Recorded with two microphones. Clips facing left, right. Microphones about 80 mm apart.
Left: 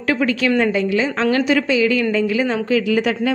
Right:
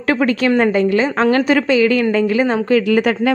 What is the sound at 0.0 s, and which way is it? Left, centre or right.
A woman's voice, right.